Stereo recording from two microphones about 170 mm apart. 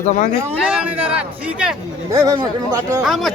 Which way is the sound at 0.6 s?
5° right (ahead or behind).